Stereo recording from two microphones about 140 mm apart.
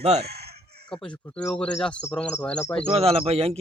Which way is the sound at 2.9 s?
45° right (ahead or behind).